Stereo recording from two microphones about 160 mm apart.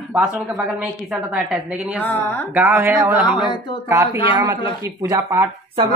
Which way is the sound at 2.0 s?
15° left (ahead or behind).